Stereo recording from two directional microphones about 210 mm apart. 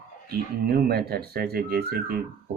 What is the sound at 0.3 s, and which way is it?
Speech, 45° right (ahead or behind).